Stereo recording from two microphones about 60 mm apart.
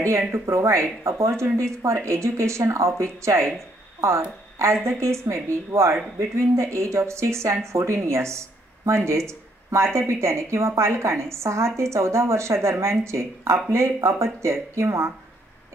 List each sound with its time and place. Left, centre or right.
0.3 s speech: right